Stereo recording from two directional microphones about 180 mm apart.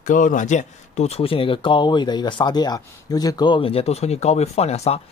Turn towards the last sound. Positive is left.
turn(degrees=35)  # may be behind; listen again after turning